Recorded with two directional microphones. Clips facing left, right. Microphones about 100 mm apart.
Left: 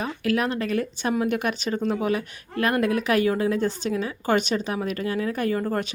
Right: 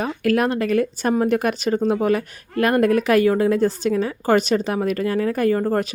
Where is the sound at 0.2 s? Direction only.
45° right (ahead or behind).